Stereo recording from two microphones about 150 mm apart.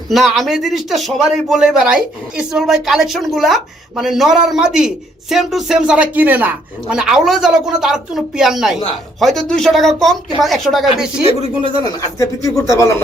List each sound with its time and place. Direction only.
0.1 s speech: centre (ahead or behind)
11.3 s speech: 40° left (ahead or behind)
11.8 s speech: 25° left (ahead or behind)